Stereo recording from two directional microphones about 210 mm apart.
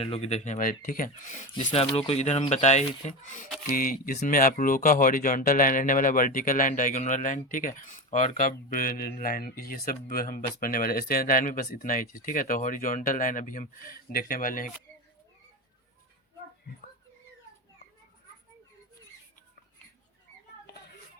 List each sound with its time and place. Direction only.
0.0 s speech: 30° left (ahead or behind)